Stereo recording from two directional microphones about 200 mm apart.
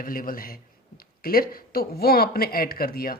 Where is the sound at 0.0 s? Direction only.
45° left (ahead or behind).